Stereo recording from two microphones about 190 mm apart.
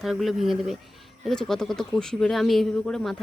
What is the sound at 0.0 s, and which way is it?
Speech, centre (ahead or behind).